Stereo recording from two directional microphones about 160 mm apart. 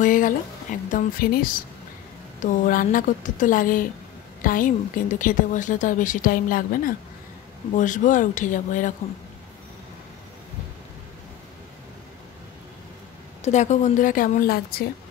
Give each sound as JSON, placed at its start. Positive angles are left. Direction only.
{"t": 0.0, "sound": "a woman's voice", "side_deg": 55}
{"t": 2.4, "sound": "a woman's voice", "side_deg": 55}
{"t": 13.4, "sound": "a woman's voice", "side_deg": 45}